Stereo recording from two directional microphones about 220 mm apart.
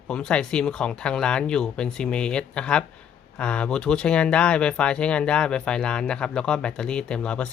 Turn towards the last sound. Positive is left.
turn(degrees=5)  # may be behind; listen again after turning